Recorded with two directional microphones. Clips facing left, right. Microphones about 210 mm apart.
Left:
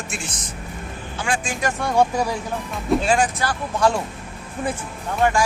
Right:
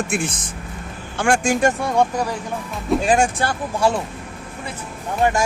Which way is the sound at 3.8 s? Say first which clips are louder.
Even; 5° right (ahead or behind).